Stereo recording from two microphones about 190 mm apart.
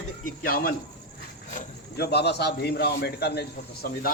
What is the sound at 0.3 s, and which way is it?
Speech, 50° left (ahead or behind).